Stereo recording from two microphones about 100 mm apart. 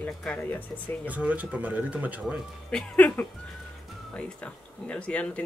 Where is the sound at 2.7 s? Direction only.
15° left (ahead or behind).